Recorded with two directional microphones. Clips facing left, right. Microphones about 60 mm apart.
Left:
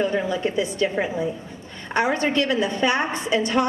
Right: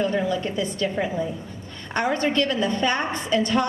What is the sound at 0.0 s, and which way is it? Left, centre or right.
A woman's voice, centre.